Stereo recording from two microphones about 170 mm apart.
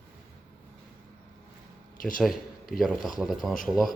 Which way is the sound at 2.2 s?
Centre (ahead or behind).